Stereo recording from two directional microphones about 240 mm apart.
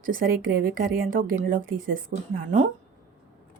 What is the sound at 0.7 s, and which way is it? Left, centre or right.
A woman's voice, right.